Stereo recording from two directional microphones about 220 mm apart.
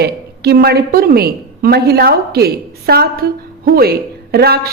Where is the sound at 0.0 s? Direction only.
45° right (ahead or behind).